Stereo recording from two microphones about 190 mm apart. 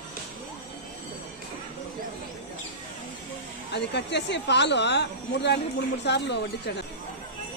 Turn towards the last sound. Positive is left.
turn(degrees=65)  # may be behind; listen again after turning